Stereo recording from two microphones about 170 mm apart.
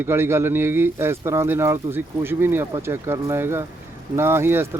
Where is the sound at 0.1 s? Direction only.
15° right (ahead or behind).